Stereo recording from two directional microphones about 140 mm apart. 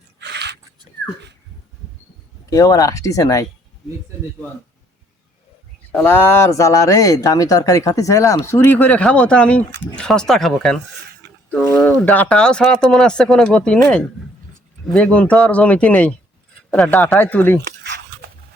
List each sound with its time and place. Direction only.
2.5 s speech: 25° left (ahead or behind)
5.9 s speech: 15° left (ahead or behind)